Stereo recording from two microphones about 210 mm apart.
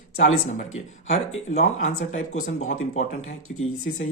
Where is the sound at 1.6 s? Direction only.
35° left (ahead or behind).